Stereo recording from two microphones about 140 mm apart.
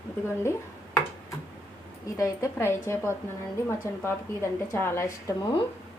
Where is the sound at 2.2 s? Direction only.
20° left (ahead or behind).